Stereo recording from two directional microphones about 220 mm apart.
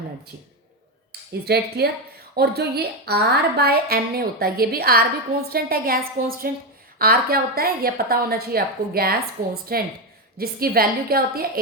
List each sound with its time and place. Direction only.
1.3 s a woman's voice: 45° right (ahead or behind)